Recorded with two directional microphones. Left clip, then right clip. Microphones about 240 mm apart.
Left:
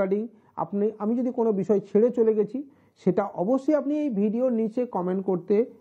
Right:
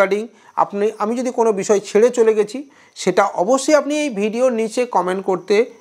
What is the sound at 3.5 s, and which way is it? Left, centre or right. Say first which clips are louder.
A woman's voice: right 8 dB; centre.